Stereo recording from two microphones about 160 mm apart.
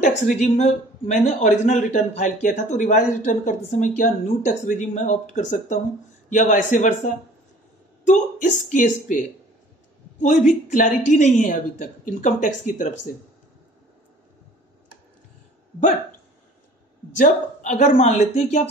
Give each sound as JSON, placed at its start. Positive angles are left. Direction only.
{"t": 0.0, "sound": "speech", "side_deg": 45}
{"t": 8.0, "sound": "speech", "side_deg": 50}
{"t": 10.2, "sound": "speech", "side_deg": 50}
{"t": 17.2, "sound": "speech", "side_deg": 50}